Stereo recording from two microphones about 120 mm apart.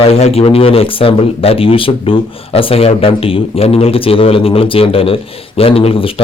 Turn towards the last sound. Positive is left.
turn(degrees=50)  # may be behind; listen again after turning